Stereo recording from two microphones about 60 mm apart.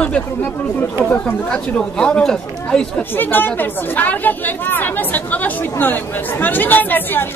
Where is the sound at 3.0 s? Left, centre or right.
Left.